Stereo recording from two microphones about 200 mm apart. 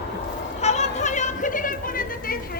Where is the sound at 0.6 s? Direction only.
35° left (ahead or behind).